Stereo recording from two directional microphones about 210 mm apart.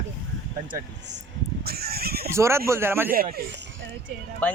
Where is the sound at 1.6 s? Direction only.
50° right (ahead or behind).